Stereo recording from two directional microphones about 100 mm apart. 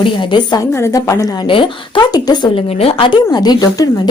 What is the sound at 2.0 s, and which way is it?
Speech, 40° left (ahead or behind).